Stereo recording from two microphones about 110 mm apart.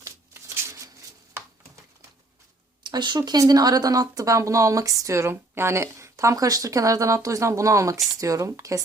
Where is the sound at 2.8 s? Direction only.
45° right (ahead or behind).